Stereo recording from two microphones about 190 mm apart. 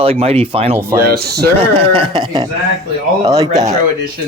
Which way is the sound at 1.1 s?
55° right (ahead or behind).